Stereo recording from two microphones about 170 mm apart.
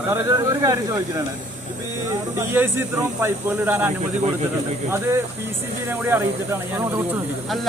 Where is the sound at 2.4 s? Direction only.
10° right (ahead or behind).